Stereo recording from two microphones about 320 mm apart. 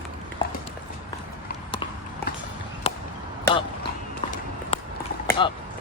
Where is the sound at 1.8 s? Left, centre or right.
Centre.